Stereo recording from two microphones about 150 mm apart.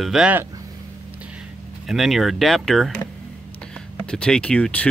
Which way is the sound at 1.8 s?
Centre (ahead or behind).